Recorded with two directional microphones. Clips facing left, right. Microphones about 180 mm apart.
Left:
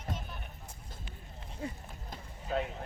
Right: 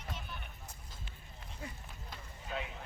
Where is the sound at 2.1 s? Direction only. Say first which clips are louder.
Left 7 dB; 45° left (ahead or behind).